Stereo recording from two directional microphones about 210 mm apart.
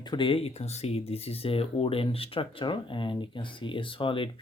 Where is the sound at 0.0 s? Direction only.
20° left (ahead or behind).